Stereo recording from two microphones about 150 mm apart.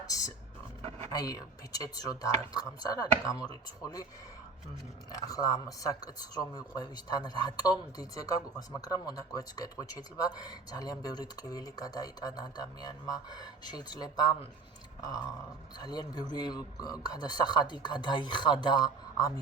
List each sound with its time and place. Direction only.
0.0 s speech: 25° left (ahead or behind)
5.1 s speech: 25° left (ahead or behind)